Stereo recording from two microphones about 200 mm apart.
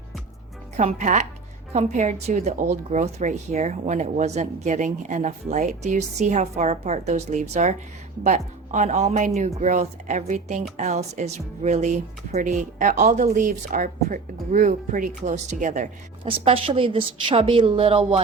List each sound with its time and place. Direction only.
0.8 s speech: 35° right (ahead or behind)
16.2 s a woman's voice: 25° right (ahead or behind)